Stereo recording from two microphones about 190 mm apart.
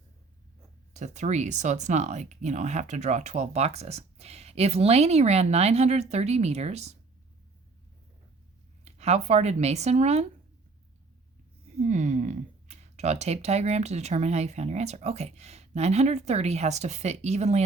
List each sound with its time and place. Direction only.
0.9 s speech: 40° right (ahead or behind)
8.8 s speech: 35° right (ahead or behind)
11.8 s speech: 40° right (ahead or behind)